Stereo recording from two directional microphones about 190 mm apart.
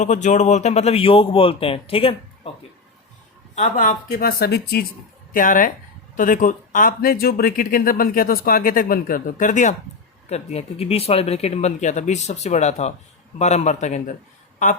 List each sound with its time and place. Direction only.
0.0 s speech: 40° left (ahead or behind)
3.5 s speech: 45° left (ahead or behind)